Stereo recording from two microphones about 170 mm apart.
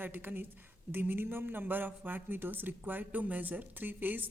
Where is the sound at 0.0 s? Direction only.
10° right (ahead or behind).